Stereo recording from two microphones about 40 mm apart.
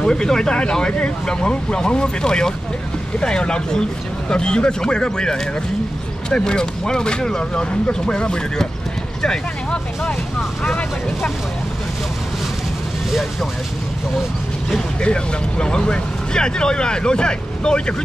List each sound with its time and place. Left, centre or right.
0.0 s speech: centre
13.1 s speech: centre
14.7 s speech: left